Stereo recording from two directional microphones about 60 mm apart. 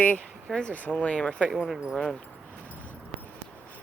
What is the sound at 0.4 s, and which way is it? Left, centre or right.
Speech, centre.